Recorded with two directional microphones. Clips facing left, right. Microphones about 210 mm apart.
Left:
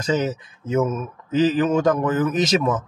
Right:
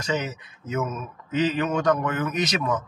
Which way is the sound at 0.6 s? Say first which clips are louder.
Left 7 dB; 25° left (ahead or behind).